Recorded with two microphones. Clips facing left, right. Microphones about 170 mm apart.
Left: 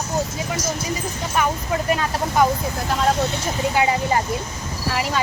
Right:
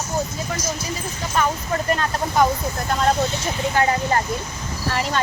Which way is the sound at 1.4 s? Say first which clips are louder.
Even; 10° left (ahead or behind).